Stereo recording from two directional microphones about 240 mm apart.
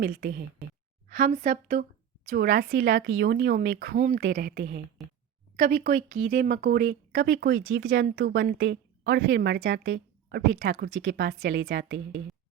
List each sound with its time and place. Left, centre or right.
0.0 s speech: right
5.0 s a woman's voice: centre
5.5 s speech: right